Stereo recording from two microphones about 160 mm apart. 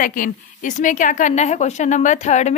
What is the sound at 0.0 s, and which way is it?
A woman's voice, 55° left (ahead or behind).